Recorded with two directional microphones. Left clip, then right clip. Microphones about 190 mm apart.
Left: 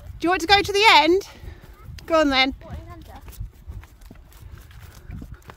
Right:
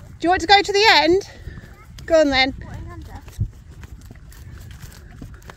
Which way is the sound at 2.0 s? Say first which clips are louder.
Right 3 dB; 10° left (ahead or behind).